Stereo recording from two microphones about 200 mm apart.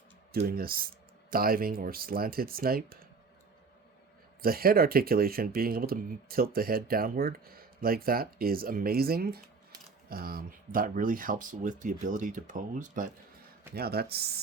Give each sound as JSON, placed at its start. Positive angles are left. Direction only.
{"t": 0.3, "sound": "speech", "side_deg": -50}
{"t": 4.4, "sound": "speech", "side_deg": -50}
{"t": 13.7, "sound": "speech", "side_deg": -50}